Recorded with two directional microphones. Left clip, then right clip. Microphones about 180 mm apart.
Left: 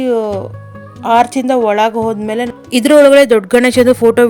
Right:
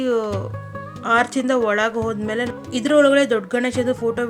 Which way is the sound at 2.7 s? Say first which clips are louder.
Left 9 dB; 45° left (ahead or behind).